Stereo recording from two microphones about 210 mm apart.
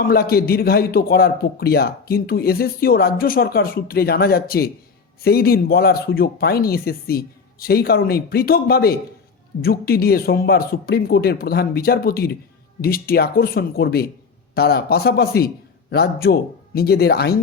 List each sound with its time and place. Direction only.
0.0 s a man's voice: 45° left (ahead or behind)